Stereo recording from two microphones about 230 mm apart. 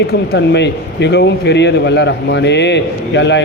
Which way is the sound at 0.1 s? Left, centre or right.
Left.